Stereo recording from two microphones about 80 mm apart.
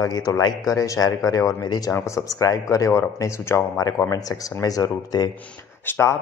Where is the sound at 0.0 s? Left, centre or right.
Left.